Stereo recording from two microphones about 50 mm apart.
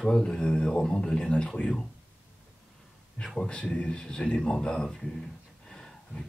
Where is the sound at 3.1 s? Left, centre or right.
Centre.